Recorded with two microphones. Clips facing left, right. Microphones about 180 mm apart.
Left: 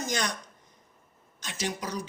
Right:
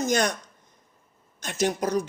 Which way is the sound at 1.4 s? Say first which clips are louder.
Right 8 dB; 50° right (ahead or behind).